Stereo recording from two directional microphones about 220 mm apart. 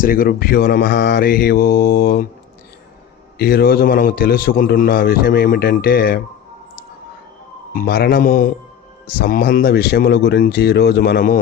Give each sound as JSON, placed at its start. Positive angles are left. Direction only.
{"t": 0.0, "sound": "a man's voice", "side_deg": 40}
{"t": 3.3, "sound": "a man's voice", "side_deg": 45}
{"t": 7.7, "sound": "a man's voice", "side_deg": 40}